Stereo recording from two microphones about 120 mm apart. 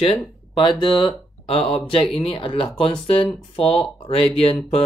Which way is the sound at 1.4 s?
55° left (ahead or behind).